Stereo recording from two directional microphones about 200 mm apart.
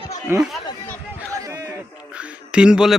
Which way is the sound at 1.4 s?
15° right (ahead or behind).